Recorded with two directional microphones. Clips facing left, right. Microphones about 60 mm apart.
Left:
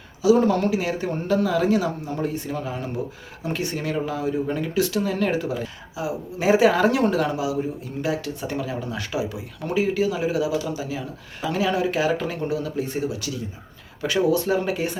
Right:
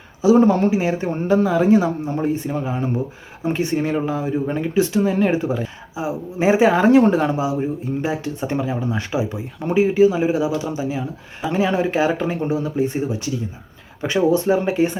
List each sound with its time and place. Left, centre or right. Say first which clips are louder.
0.2 s speech: right 4 dB; right